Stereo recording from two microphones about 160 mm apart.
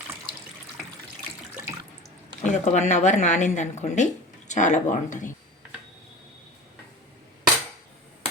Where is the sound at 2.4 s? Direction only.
50° left (ahead or behind).